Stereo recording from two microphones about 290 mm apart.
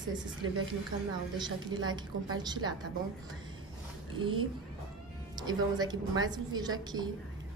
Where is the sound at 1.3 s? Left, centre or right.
Centre.